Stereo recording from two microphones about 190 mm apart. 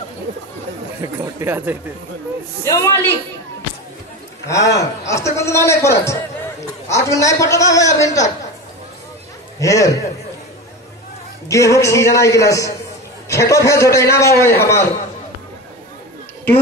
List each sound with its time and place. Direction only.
1.0 s speech: 10° right (ahead or behind)
2.6 s a man's voice: 15° left (ahead or behind)
4.5 s a man's voice: 15° left (ahead or behind)
9.6 s a man's voice: 15° left (ahead or behind)
11.4 s a man's voice: 15° left (ahead or behind)